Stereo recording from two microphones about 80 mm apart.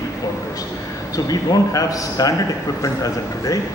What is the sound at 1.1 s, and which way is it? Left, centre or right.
A man's voice, left.